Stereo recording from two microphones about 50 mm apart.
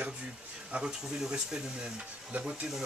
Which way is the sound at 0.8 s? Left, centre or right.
Centre.